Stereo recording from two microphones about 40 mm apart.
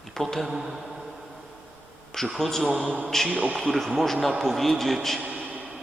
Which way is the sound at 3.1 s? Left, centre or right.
Centre.